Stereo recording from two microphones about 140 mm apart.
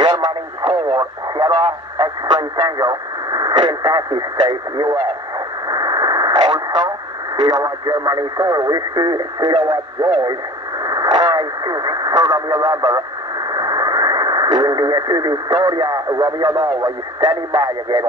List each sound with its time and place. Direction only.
0.0 s speech: 35° right (ahead or behind)
5.7 s radio: 30° right (ahead or behind)
7.4 s speech: 30° right (ahead or behind)
16.4 s speech: 40° right (ahead or behind)